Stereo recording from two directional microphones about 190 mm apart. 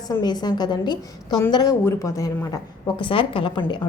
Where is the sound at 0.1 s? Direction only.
20° left (ahead or behind).